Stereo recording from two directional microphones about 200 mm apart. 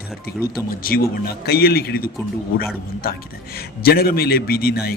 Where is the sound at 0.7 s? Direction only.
45° left (ahead or behind).